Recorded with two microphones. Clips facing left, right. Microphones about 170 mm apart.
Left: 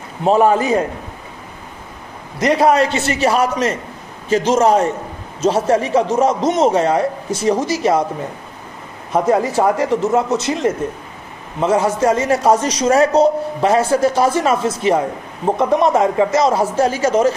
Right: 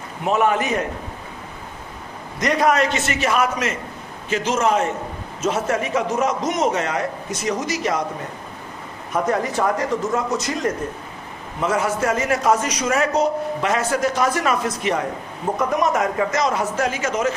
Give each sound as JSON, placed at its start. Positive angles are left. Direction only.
{"t": 0.2, "sound": "a man's voice", "side_deg": 30}
{"t": 2.3, "sound": "a man's voice", "side_deg": 30}
{"t": 9.1, "sound": "a man's voice", "side_deg": 30}